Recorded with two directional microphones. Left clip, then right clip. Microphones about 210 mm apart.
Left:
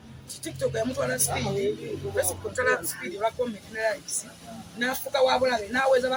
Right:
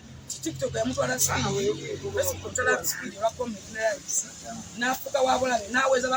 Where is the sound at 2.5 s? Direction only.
25° left (ahead or behind).